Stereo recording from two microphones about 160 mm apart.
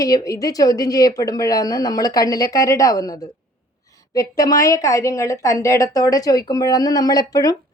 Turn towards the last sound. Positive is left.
turn(degrees=25)  # may be behind; listen again after turning